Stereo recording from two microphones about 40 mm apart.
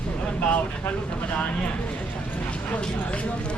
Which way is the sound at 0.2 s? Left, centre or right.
Left.